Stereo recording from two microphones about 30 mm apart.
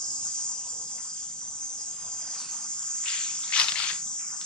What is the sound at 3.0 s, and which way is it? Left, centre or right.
Cricket, left.